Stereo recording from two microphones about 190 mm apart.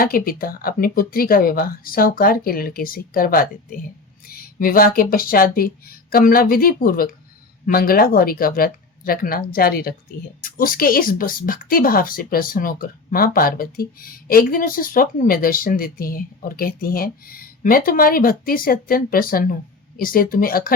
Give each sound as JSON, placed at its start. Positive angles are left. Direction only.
{"t": 0.0, "sound": "speech", "side_deg": 50}
{"t": 4.3, "sound": "a sound", "side_deg": 50}
{"t": 5.1, "sound": "speech", "side_deg": 50}